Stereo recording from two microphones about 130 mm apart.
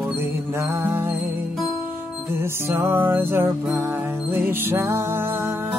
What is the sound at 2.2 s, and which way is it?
Music, 20° right (ahead or behind).